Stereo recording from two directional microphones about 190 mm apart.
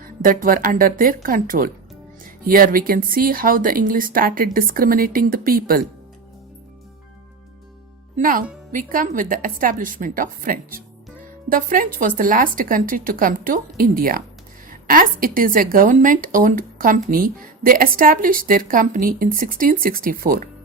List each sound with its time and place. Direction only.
0.0 s a woman's voice: 45° right (ahead or behind)
8.1 s a woman's voice: 45° right (ahead or behind)